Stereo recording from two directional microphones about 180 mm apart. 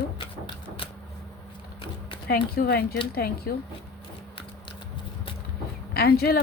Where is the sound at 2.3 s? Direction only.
60° left (ahead or behind).